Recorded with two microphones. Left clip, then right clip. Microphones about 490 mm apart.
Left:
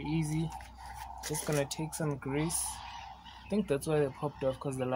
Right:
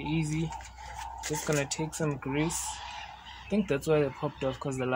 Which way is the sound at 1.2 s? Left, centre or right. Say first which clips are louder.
Right 3 dB; left.